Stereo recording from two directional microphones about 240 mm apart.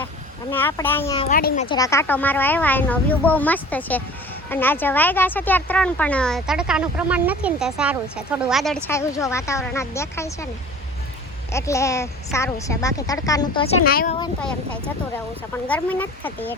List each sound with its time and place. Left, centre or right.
0.5 s speech: centre
1.2 s a child's voice: left
1.6 s speech: centre
11.5 s speech: centre
13.8 s a child's voice: left
15.6 s speech: centre